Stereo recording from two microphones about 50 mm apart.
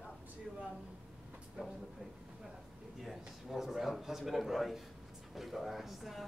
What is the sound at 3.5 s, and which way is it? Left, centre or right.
A man's voice, centre.